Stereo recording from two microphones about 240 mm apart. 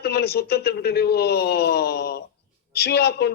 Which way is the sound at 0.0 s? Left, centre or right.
Left.